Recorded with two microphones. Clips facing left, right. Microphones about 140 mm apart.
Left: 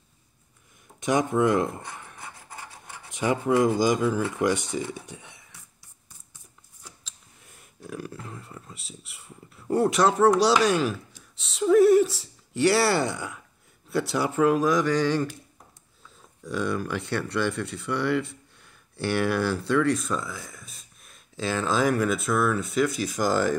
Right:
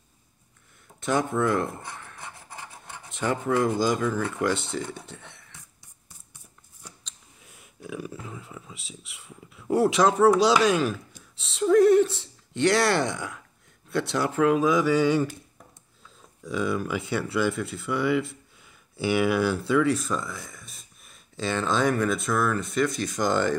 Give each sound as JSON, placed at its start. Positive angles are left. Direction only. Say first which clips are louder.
{"t": 1.0, "sound": "speech", "louder": "left 2 dB", "side_deg": 15}
{"t": 6.8, "sound": "a sound", "louder": "right 1 dB", "side_deg": 0}
{"t": 13.8, "sound": "speech", "louder": "even", "side_deg": 10}
{"t": 16.4, "sound": "speech", "louder": "right 1 dB", "side_deg": 0}